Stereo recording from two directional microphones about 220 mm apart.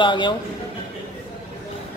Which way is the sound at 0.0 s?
20° left (ahead or behind).